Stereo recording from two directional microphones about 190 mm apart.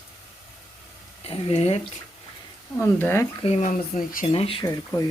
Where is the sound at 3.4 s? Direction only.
35° left (ahead or behind).